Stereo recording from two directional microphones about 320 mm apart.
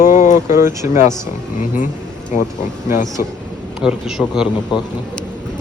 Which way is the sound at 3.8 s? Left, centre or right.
Centre.